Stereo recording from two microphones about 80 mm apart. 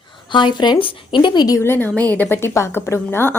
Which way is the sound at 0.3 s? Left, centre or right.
Left.